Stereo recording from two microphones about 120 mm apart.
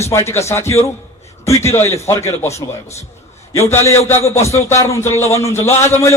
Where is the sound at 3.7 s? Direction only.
20° left (ahead or behind).